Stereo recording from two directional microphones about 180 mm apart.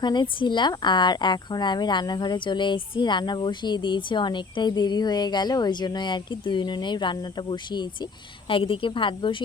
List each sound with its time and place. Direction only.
0.0 s speech: 25° left (ahead or behind)